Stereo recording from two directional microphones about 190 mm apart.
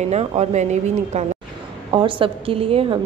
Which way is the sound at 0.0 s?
35° right (ahead or behind).